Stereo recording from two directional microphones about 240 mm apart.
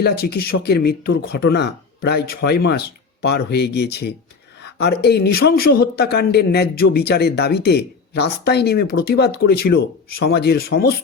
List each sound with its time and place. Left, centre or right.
0.0 s speech: left